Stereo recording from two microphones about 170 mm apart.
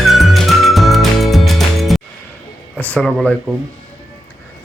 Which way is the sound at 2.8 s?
5° left (ahead or behind).